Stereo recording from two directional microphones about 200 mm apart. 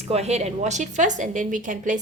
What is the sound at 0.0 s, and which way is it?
Speech, 30° right (ahead or behind).